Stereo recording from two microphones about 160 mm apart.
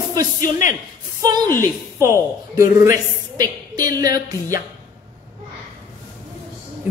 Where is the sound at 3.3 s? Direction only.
25° right (ahead or behind).